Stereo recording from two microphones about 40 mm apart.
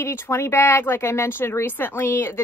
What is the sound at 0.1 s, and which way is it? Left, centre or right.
Speech, left.